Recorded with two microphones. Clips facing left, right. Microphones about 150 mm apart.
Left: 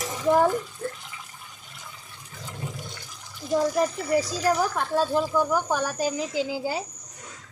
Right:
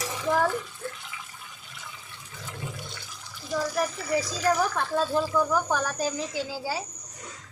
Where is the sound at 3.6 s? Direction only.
20° left (ahead or behind).